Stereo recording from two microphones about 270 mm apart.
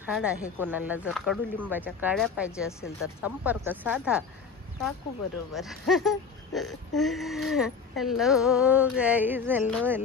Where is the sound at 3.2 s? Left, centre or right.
Centre.